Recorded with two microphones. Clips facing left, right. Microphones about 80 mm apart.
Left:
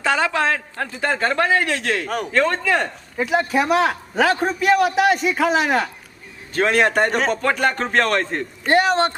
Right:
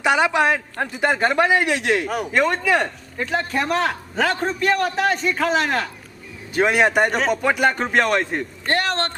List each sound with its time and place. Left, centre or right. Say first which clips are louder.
0.0 s a man's voice: right 2 dB; centre
2.0 s speech: even; centre
2.3 s a man's voice: even; centre
3.2 s a man's voice: left 4 dB; centre
6.5 s a man's voice: even; centre
8.6 s a man's voice: left 6 dB; centre